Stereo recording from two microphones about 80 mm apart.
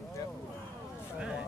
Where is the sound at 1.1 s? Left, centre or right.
Centre.